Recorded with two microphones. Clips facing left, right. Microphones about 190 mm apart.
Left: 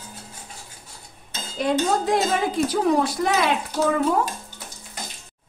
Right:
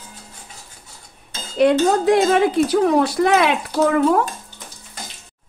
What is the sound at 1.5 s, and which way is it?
Speech, 70° right (ahead or behind).